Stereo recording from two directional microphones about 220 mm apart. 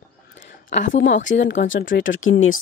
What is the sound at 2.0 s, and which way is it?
Speech, 60° left (ahead or behind).